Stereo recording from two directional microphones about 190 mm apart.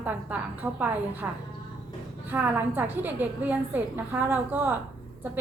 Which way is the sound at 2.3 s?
10° right (ahead or behind).